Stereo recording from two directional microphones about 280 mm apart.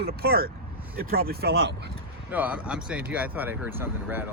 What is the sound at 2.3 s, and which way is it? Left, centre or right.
Speech, centre.